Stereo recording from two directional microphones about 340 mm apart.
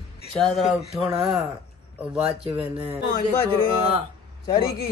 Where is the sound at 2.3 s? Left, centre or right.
Centre.